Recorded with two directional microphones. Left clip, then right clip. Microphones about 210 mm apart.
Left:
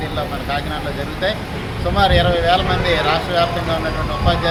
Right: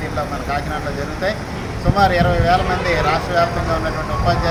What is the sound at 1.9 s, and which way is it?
Speech, 5° right (ahead or behind).